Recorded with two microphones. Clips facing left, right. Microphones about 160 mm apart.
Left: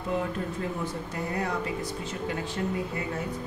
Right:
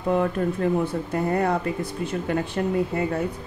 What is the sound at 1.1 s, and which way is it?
Speech, 55° right (ahead or behind).